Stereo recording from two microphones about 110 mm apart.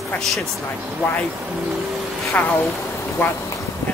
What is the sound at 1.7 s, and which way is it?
Vehicle, centre (ahead or behind).